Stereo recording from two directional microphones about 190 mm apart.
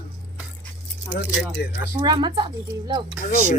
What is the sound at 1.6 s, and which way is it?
Speech, 55° left (ahead or behind).